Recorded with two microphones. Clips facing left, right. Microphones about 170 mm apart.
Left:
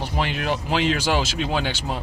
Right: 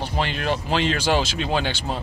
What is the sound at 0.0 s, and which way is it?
Speech, 5° left (ahead or behind).